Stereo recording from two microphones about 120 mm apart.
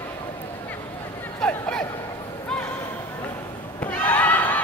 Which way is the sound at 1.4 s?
5° left (ahead or behind).